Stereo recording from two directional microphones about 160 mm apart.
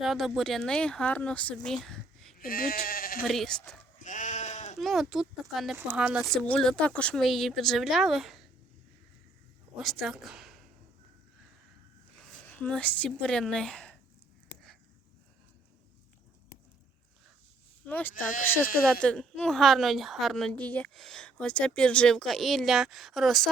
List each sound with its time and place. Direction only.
0.0 s speech: centre (ahead or behind)
2.4 s speech: 65° left (ahead or behind)
3.2 s speech: centre (ahead or behind)
4.0 s goat: 50° left (ahead or behind)
4.8 s speech: centre (ahead or behind)
5.7 s speech: 10° right (ahead or behind)
9.7 s speech: centre (ahead or behind)
12.3 s a woman's voice: 10° left (ahead or behind)
17.8 s speech: 10° left (ahead or behind)
18.1 s speech: 55° left (ahead or behind)
18.4 s speech: 10° left (ahead or behind)